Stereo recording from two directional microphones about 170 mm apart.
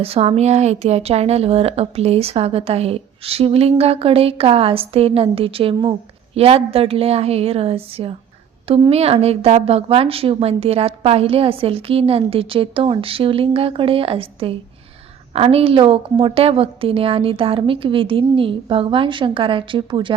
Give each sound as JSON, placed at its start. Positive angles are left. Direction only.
{"t": 0.0, "sound": "a woman's voice", "side_deg": -35}